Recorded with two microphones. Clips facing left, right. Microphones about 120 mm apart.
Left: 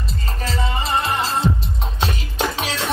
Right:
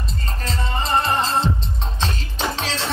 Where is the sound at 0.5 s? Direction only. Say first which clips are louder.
Even; 5° left (ahead or behind).